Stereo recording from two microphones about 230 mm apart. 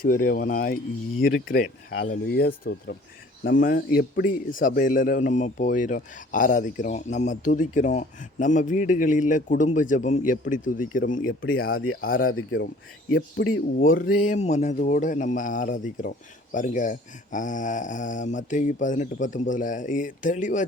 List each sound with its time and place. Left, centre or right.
0.0 s speech: left
12.4 s speech: left
13.7 s speech: left